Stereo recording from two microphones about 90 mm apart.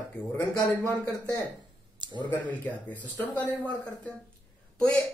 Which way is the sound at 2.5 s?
15° left (ahead or behind).